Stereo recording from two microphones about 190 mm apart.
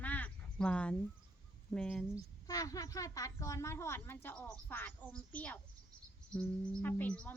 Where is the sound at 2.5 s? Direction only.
15° left (ahead or behind).